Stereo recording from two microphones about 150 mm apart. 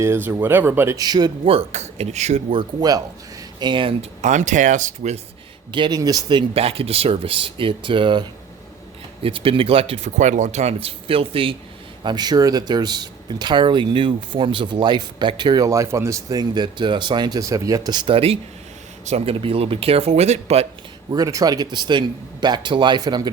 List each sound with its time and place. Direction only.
0.0 s speech: 15° right (ahead or behind)
1.5 s speech: 45° right (ahead or behind)
2.6 s speech: 25° right (ahead or behind)
4.2 s speech: 55° right (ahead or behind)
5.7 s speech: 30° right (ahead or behind)
12.0 s speech: 25° right (ahead or behind); by 20.7 s 45° right (ahead or behind)
21.1 s speech: 25° right (ahead or behind)